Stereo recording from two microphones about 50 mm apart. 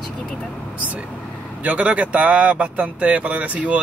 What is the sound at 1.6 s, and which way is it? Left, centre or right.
A man's voice, right.